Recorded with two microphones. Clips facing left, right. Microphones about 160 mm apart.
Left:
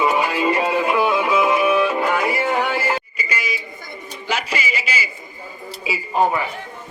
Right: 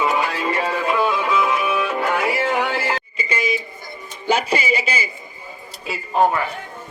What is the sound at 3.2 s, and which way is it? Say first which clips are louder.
Music: right 4 dB; 25° right (ahead or behind).